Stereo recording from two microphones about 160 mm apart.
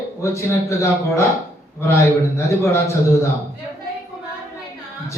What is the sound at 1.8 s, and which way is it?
A man's voice, 15° left (ahead or behind).